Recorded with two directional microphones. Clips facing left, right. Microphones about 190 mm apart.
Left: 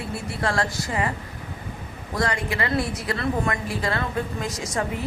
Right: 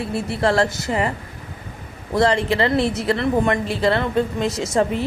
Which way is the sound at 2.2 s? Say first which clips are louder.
Right 8 dB; 25° right (ahead or behind).